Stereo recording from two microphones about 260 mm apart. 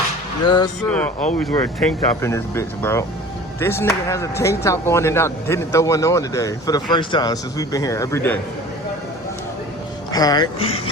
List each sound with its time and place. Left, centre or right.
0.4 s speech: centre
0.9 s speech: centre
10.1 s speech: centre